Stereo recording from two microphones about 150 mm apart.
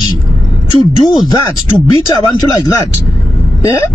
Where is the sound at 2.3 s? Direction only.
25° left (ahead or behind).